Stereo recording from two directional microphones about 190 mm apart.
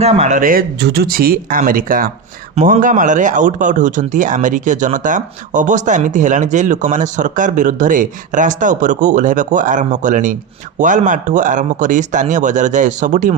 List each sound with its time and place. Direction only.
0.0 s speech: 35° right (ahead or behind)